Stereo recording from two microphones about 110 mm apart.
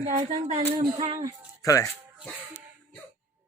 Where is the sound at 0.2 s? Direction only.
70° right (ahead or behind).